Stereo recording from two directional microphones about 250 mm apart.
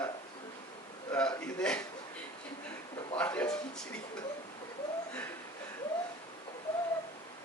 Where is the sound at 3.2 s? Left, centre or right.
Centre.